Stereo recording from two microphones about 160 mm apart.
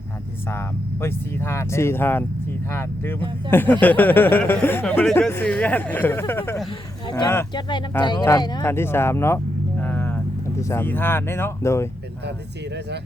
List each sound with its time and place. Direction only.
0.4 s speech: 15° left (ahead or behind)
6.7 s speech: 30° left (ahead or behind)
8.6 s speech: 15° left (ahead or behind)
9.8 s vehicle: 15° left (ahead or behind)
10.6 s speech: 15° left (ahead or behind)